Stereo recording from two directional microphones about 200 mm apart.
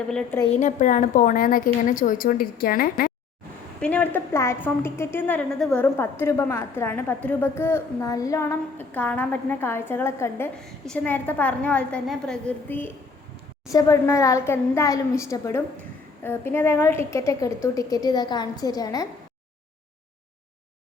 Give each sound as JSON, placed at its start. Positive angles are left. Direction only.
{"t": 0.1, "sound": "a woman's voice", "side_deg": 5}
{"t": 0.5, "sound": "a woman's voice", "side_deg": 40}
{"t": 3.8, "sound": "a woman's voice", "side_deg": 5}